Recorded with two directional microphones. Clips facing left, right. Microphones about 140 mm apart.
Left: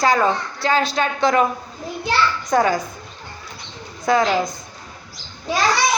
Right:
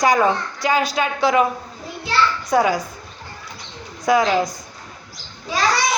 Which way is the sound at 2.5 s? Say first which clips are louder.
Even; 10° right (ahead or behind).